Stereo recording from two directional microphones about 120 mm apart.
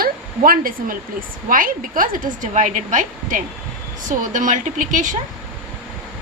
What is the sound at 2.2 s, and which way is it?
A woman's voice, 90° right.